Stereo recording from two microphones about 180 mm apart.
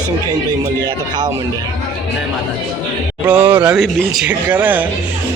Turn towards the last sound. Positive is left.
turn(degrees=-10)  # may be behind; listen again after turning